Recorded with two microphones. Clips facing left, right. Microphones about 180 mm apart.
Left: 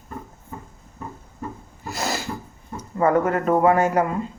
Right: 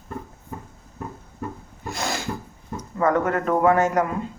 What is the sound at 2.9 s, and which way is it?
Speech, 10° left (ahead or behind).